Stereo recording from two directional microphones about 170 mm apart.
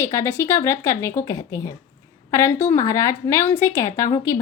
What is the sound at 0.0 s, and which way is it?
A woman's voice, 20° left (ahead or behind).